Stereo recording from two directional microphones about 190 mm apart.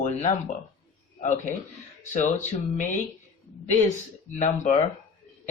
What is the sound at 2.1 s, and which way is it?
Speech, 40° left (ahead or behind).